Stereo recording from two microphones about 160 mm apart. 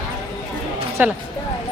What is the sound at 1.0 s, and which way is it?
Speech, 10° right (ahead or behind).